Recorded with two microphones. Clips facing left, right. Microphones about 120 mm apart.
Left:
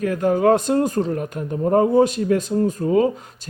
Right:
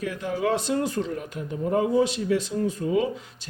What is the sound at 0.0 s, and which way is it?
Speech, 50° left (ahead or behind).